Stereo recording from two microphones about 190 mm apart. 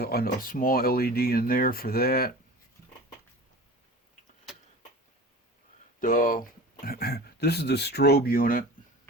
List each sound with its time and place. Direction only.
0.0 s speech: 55° left (ahead or behind)
6.0 s speech: 45° left (ahead or behind)